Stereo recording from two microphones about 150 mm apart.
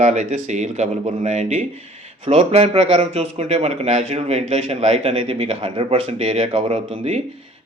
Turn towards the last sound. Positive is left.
turn(degrees=-40)  # may be behind; listen again after turning